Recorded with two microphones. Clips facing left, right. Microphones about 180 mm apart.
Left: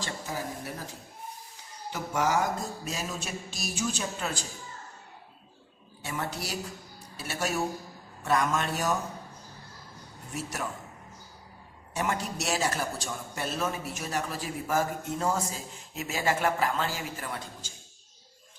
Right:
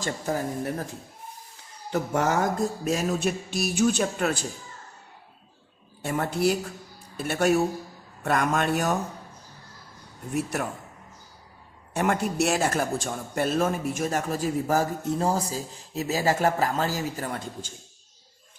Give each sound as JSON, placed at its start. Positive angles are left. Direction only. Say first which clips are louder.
{"t": 0.0, "sound": "speech", "louder": "right 7 dB", "side_deg": -50}
{"t": 1.9, "sound": "mantra", "louder": "right 4 dB", "side_deg": -55}
{"t": 6.0, "sound": "speech", "louder": "right 9 dB", "side_deg": -50}
{"t": 7.2, "sound": "mantra", "louder": "right 8 dB", "side_deg": -55}
{"t": 10.3, "sound": "mantra", "louder": "right 7 dB", "side_deg": -60}
{"t": 11.9, "sound": "a man's voice", "louder": "right 7 dB", "side_deg": -55}